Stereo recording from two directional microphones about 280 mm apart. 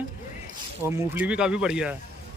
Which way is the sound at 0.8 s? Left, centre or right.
Centre.